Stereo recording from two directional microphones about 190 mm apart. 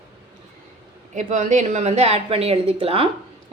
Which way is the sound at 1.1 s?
40° right (ahead or behind).